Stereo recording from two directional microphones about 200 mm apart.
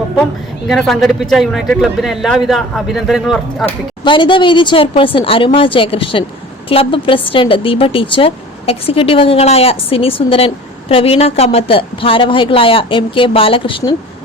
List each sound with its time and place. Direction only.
0.7 s speech: centre (ahead or behind)
4.0 s speech: 25° left (ahead or behind)